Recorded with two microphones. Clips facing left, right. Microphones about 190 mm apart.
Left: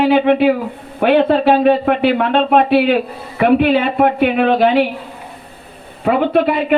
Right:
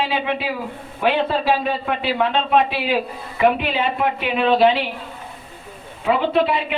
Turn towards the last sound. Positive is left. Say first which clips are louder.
# left 5 dB
turn(degrees=55)  # may be behind; listen again after turning